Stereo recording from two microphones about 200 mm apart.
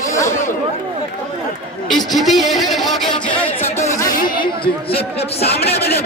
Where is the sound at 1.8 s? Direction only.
Centre (ahead or behind); by 5.8 s 30° left (ahead or behind).